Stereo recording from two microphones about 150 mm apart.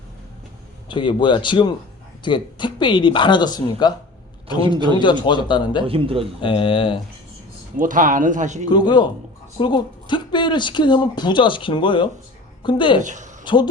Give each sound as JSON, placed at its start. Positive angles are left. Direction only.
{"t": 0.9, "sound": "a man's voice", "side_deg": 30}
{"t": 5.8, "sound": "speech", "side_deg": -40}
{"t": 6.4, "sound": "speech", "side_deg": 35}
{"t": 7.8, "sound": "speech", "side_deg": -60}
{"t": 8.7, "sound": "a man's voice", "side_deg": 30}
{"t": 13.0, "sound": "a woman's voice", "side_deg": -55}
{"t": 13.4, "sound": "speech", "side_deg": 30}